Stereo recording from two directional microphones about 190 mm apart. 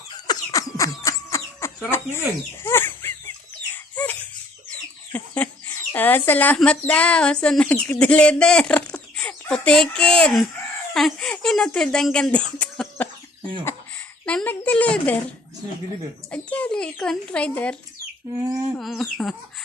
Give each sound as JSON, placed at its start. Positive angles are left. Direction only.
{"t": 0.1, "sound": "a sound", "side_deg": 20}
{"t": 2.6, "sound": "chicken", "side_deg": 10}
{"t": 3.7, "sound": "a sound", "side_deg": 10}
{"t": 5.1, "sound": "speech", "side_deg": 10}
{"t": 16.3, "sound": "speech", "side_deg": 5}
{"t": 18.8, "sound": "speech", "side_deg": 0}